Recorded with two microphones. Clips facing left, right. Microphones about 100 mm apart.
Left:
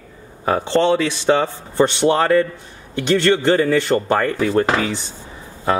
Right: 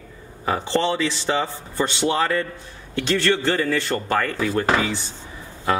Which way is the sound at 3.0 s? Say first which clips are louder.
Left 5 dB; 15° left (ahead or behind).